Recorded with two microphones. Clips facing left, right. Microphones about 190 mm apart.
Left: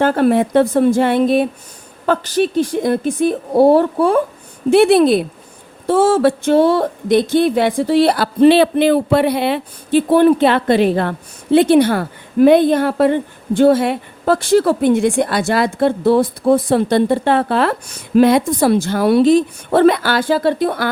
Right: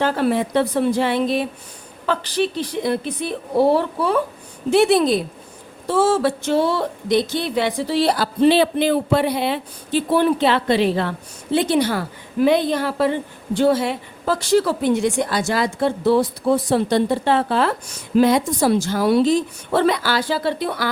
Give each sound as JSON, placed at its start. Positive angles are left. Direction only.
{"t": 0.0, "sound": "speech", "side_deg": 50}
{"t": 4.7, "sound": "a woman's voice", "side_deg": 55}